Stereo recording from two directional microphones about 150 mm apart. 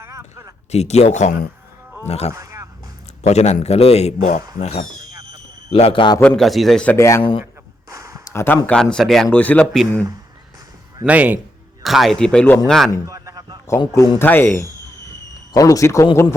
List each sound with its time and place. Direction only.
0.0 s a sound: 20° right (ahead or behind)
0.7 s a man's voice: 45° left (ahead or behind)
2.3 s a sound: 20° right (ahead or behind)
3.2 s a man's voice: 50° left (ahead or behind)
6.1 s a man's voice: 5° left (ahead or behind)
6.9 s speech: 20° left (ahead or behind)
7.2 s a man's voice: 35° left (ahead or behind)
7.9 s a sound: 20° right (ahead or behind)
8.3 s speech: 15° left (ahead or behind)
11.0 s a man's voice: 10° right (ahead or behind)
13.1 s a sound: 25° right (ahead or behind)
13.7 s speech: 20° left (ahead or behind)